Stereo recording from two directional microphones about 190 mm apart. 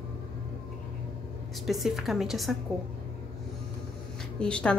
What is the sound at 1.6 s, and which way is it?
Speech, centre (ahead or behind).